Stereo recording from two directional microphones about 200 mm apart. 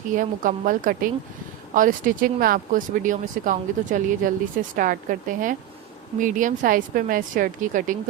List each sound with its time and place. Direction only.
0.2 s a woman's voice: 40° right (ahead or behind)